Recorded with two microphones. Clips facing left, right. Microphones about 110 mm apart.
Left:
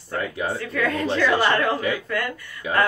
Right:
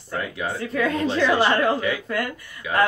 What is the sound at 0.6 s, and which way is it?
Speech, 25° right (ahead or behind).